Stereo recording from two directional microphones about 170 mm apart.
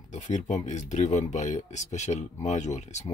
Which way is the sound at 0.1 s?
45° left (ahead or behind).